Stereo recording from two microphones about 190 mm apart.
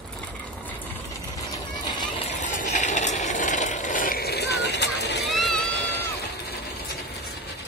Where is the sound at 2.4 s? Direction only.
40° left (ahead or behind); by 5.2 s 65° left (ahead or behind).